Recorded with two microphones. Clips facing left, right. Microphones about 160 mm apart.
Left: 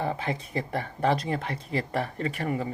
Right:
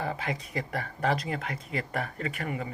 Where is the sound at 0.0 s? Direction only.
30° left (ahead or behind).